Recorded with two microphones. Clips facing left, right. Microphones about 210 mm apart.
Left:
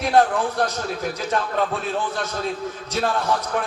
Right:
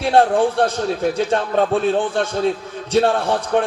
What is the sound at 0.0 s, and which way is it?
A man's voice, 30° right (ahead or behind).